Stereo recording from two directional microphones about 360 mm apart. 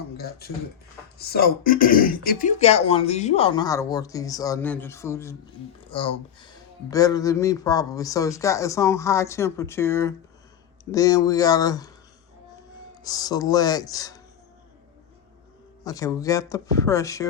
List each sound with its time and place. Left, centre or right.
0.2 s speech: left; by 11.9 s centre
13.0 s speech: centre
15.8 s speech: centre